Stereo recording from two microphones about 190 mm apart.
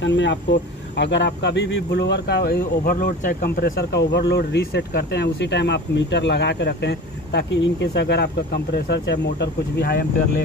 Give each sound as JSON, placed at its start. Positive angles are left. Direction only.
{"t": 0.0, "sound": "speech", "side_deg": 70}